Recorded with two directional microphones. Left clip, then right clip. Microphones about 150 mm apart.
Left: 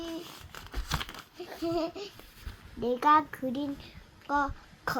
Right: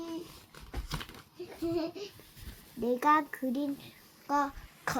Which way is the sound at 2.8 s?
15° right (ahead or behind).